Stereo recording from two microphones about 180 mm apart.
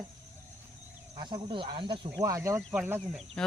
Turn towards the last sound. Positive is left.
turn(degrees=-10)  # may be behind; listen again after turning